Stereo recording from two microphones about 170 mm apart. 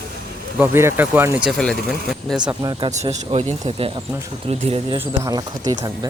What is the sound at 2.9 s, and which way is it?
Speech, 40° right (ahead or behind).